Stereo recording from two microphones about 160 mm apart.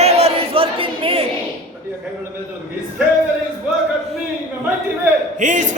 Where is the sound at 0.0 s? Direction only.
40° right (ahead or behind).